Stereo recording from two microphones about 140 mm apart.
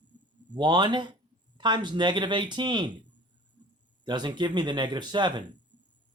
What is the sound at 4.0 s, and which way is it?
Speech, 30° right (ahead or behind).